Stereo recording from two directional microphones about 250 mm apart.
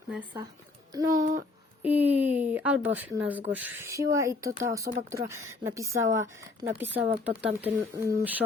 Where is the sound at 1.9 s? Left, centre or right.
Centre.